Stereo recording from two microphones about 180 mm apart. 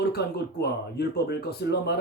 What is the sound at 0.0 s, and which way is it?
Speech, 65° left (ahead or behind).